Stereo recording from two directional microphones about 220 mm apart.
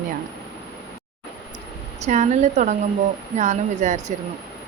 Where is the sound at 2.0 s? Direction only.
30° right (ahead or behind).